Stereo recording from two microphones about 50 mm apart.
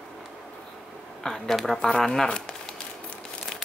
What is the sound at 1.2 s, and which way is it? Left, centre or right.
Speech, centre.